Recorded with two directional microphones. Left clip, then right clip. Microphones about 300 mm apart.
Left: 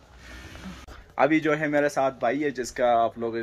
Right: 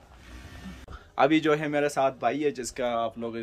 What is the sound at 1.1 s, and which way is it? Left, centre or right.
Speech, centre.